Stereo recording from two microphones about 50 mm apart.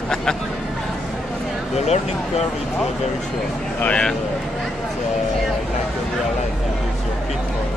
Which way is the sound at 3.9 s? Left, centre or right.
Left.